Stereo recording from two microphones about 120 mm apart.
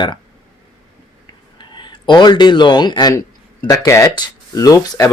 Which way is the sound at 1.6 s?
40° left (ahead or behind).